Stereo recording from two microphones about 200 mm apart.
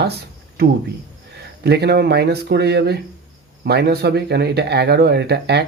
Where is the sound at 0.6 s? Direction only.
50° right (ahead or behind).